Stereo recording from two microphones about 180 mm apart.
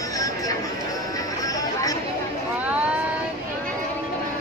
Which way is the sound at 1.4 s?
20° left (ahead or behind).